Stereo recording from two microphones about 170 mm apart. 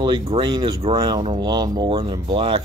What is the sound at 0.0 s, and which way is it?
Speech, 30° right (ahead or behind).